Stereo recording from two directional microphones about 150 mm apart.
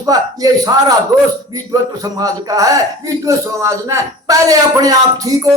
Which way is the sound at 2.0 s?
25° right (ahead or behind).